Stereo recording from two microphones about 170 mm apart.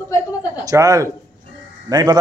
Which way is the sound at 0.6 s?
20° right (ahead or behind).